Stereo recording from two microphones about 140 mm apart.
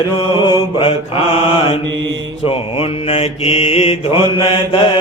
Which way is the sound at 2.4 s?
45° left (ahead or behind).